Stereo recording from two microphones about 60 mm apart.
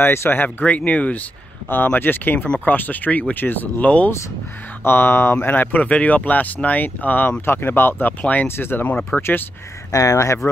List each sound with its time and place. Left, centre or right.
0.0 s speech: left
8.2 s speech: left
8.5 s speech: left
9.1 s speech: centre
9.8 s speech: left